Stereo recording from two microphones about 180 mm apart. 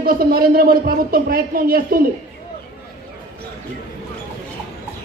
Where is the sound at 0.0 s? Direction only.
55° right (ahead or behind).